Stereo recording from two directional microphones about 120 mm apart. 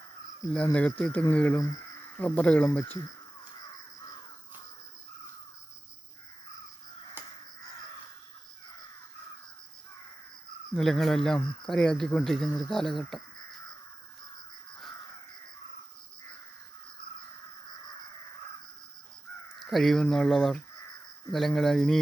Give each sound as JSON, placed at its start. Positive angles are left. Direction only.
{"t": 0.5, "sound": "speech", "side_deg": 10}
{"t": 10.8, "sound": "speech", "side_deg": 5}
{"t": 19.5, "sound": "speech", "side_deg": 0}